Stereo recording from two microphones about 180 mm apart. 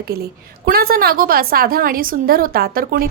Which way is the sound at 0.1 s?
60° right (ahead or behind).